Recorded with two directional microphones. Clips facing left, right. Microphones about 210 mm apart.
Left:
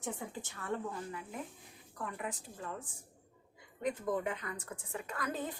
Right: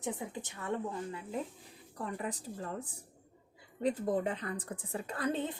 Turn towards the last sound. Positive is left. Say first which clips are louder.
# right 4 dB
turn(degrees=-25)  # may be behind; listen again after turning